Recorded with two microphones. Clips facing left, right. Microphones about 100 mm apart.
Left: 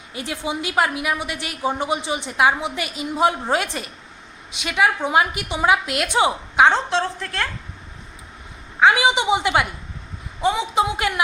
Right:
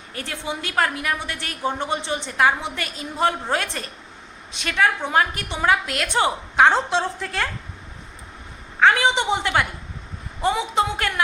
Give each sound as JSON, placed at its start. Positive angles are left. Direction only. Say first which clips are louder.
{"t": 0.1, "sound": "a woman's voice", "louder": "left 3 dB", "side_deg": 15}
{"t": 6.9, "sound": "a woman's voice", "louder": "even", "side_deg": -5}
{"t": 8.8, "sound": "a woman's voice", "louder": "left 1 dB", "side_deg": 10}
{"t": 10.4, "sound": "a woman's voice", "louder": "left 1 dB", "side_deg": 0}